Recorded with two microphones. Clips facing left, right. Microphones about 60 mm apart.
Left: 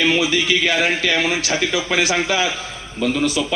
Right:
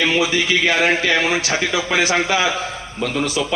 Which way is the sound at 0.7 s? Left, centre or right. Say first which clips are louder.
Right 2 dB; right.